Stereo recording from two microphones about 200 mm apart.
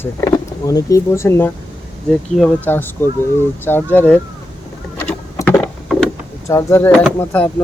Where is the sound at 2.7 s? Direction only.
10° left (ahead or behind).